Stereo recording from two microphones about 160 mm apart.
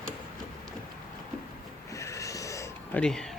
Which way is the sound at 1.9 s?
20° left (ahead or behind).